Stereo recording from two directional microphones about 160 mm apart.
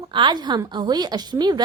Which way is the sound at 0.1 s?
30° right (ahead or behind).